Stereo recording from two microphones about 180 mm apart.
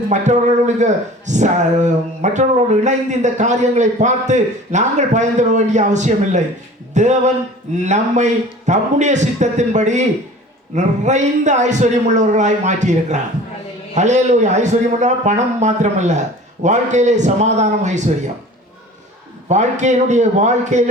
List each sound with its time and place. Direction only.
0.1 s speech: 40° right (ahead or behind)
19.5 s speech: 40° right (ahead or behind)